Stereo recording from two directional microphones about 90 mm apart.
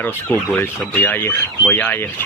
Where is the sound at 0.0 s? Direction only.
20° left (ahead or behind).